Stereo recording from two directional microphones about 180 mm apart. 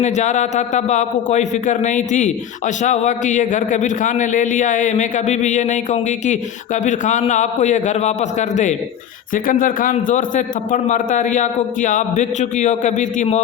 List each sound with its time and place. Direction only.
0.0 s a man's voice: 40° left (ahead or behind)